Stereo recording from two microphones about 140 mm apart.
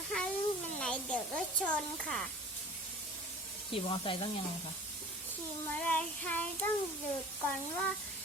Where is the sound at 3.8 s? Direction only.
40° left (ahead or behind).